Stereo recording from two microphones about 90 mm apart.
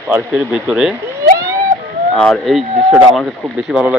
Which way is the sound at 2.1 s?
10° left (ahead or behind).